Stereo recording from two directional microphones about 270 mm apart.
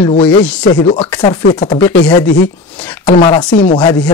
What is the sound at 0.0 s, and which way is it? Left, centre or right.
Speech, left.